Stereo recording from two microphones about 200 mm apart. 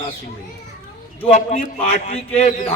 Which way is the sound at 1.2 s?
35° left (ahead or behind).